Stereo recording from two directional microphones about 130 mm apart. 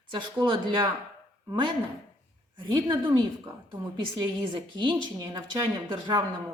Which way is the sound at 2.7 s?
35° right (ahead or behind).